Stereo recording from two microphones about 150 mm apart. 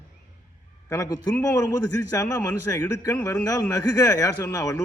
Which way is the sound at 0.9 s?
25° left (ahead or behind).